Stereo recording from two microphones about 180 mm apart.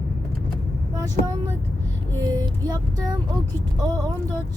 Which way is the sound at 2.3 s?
20° right (ahead or behind).